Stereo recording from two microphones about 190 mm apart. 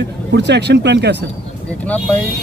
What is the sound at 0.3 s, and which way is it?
Speech, 65° right (ahead or behind).